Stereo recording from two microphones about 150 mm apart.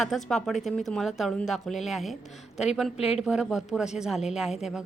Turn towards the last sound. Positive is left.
turn(degrees=-5)  # may be behind; listen again after turning